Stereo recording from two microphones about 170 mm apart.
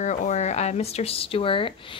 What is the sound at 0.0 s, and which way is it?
A woman's voice, 45° left (ahead or behind).